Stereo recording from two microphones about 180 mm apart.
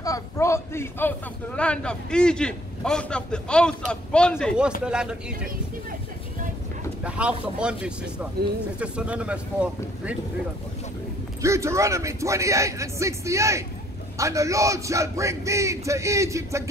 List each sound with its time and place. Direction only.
0.0 s a man's voice: 15° left (ahead or behind); by 5.5 s 5° right (ahead or behind)
7.0 s a man's voice: 5° right (ahead or behind)
11.4 s a man's voice: 15° right (ahead or behind)